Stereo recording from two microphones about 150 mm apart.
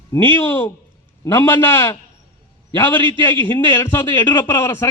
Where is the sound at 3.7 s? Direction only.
15° left (ahead or behind).